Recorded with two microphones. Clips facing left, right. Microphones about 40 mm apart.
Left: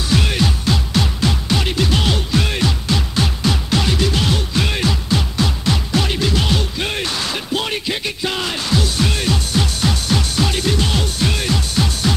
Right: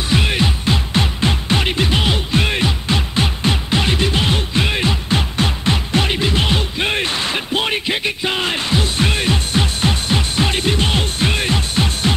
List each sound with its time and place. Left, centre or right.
0.1 s music: right